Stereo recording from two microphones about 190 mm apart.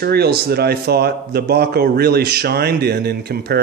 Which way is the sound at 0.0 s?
55° right (ahead or behind).